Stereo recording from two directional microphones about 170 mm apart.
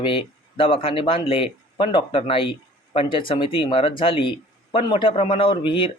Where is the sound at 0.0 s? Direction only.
30° left (ahead or behind).